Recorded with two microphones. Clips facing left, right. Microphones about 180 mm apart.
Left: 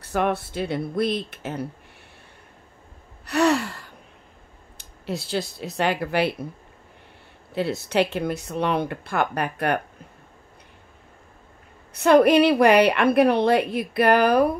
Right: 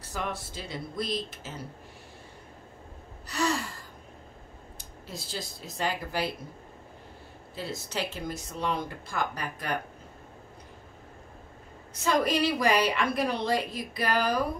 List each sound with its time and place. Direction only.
0.0 s a woman's voice: 60° left (ahead or behind)
3.3 s gasp: 65° left (ahead or behind)
4.7 s speech: 65° left (ahead or behind)
7.5 s a woman's voice: 65° left (ahead or behind)
11.9 s a woman's voice: 65° left (ahead or behind)